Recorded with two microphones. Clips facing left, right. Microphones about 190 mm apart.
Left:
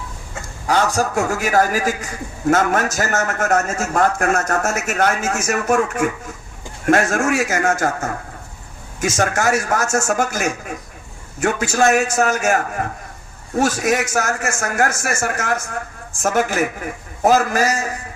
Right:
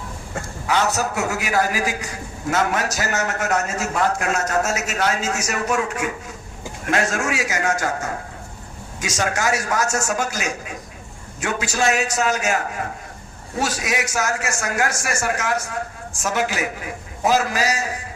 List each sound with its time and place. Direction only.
1.3 s a man's voice: 45° left (ahead or behind)